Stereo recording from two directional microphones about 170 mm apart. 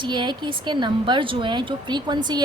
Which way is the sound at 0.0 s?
25° right (ahead or behind).